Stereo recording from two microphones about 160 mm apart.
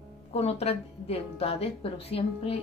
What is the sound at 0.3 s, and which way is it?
Speech, 40° left (ahead or behind).